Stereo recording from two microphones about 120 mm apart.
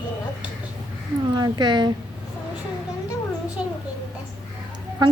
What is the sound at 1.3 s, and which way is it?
Speech, 35° right (ahead or behind).